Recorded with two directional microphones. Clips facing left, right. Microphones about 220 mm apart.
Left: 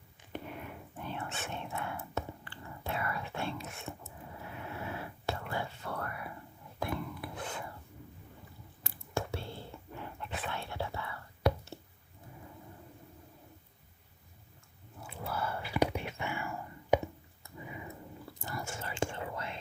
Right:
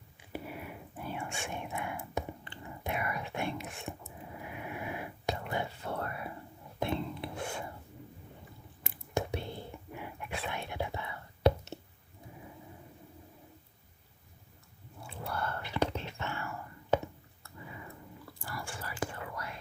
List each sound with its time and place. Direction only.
0.2 s whispering: 5° right (ahead or behind)
3.9 s a sound: 15° right (ahead or behind)
4.4 s whispering: 15° right (ahead or behind)
8.8 s whispering: 20° right (ahead or behind)
15.1 s whispering: 5° left (ahead or behind)
17.4 s dog: 20° left (ahead or behind)
18.3 s whispering: 20° left (ahead or behind)